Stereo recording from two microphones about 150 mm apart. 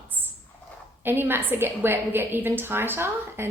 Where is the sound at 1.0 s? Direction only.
15° right (ahead or behind).